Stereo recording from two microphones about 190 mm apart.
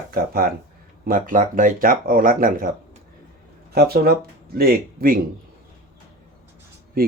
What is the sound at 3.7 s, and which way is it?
Speech, 55° right (ahead or behind).